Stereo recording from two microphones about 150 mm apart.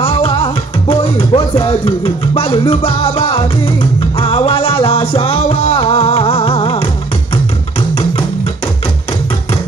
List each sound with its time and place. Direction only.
0.0 s music: 40° left (ahead or behind)